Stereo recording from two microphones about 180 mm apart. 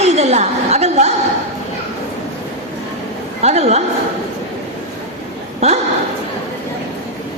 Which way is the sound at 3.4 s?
35° right (ahead or behind).